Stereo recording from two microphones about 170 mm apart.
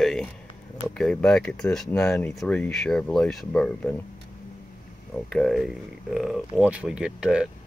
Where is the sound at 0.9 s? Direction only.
5° left (ahead or behind).